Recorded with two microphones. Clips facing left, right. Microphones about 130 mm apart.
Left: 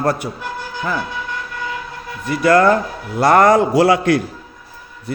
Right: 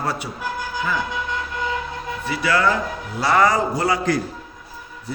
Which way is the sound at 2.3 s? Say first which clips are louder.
Left 8 dB; 50° left (ahead or behind).